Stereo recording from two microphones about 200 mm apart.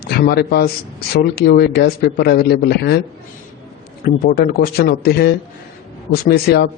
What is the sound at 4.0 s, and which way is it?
A man's voice, 50° left (ahead or behind).